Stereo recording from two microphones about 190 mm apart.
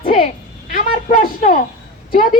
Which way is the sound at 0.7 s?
45° left (ahead or behind).